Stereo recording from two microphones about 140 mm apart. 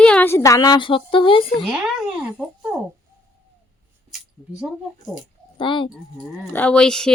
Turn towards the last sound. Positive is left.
turn(degrees=5)  # may be behind; listen again after turning